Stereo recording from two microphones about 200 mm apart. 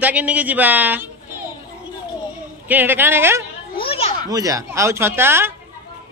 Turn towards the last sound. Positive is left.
turn(degrees=-10)  # may be behind; listen again after turning